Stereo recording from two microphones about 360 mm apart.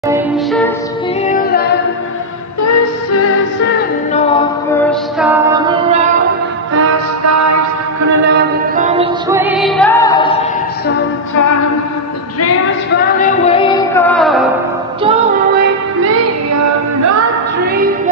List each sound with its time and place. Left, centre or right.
0.1 s music: centre
1.2 s a capella: left
2.6 s music: left
3.6 s music: centre
5.2 s music: centre
6.7 s music: right
8.3 s mantra: right
9.4 s music: centre
12.9 s music: centre
16.0 s music: right